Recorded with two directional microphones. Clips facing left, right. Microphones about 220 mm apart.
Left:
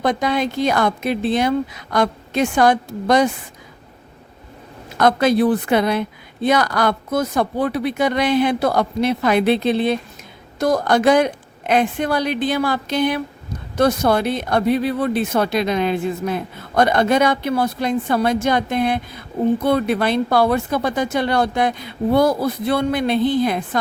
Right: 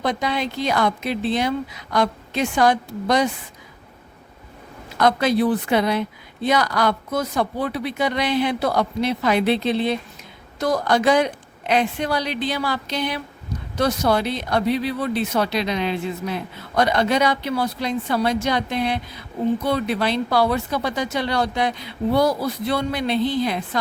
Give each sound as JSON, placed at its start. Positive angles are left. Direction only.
{"t": 0.0, "sound": "speech", "side_deg": 50}
{"t": 4.9, "sound": "speech", "side_deg": 50}